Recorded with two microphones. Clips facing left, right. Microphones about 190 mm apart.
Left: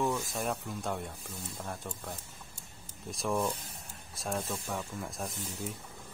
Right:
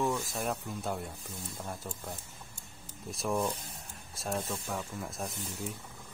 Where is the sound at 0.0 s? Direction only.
Centre (ahead or behind).